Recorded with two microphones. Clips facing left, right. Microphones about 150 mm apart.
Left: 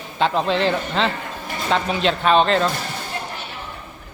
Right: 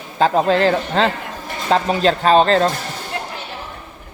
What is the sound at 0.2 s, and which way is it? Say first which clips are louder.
Speech: right 5 dB; 40° right (ahead or behind).